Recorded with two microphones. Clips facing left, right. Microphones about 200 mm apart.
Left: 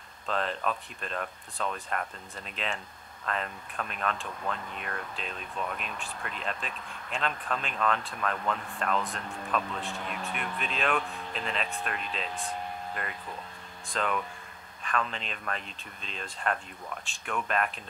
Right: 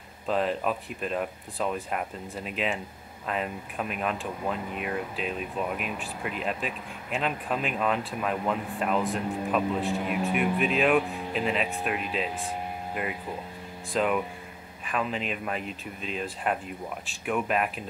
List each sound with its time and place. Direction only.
0.3 s speech: 5° right (ahead or behind)